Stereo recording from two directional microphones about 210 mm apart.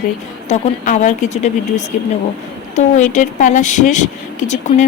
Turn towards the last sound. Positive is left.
turn(degrees=35)  # may be behind; listen again after turning